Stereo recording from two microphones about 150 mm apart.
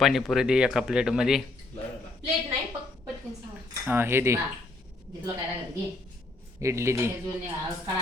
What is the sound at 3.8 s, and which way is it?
Speech, 15° right (ahead or behind).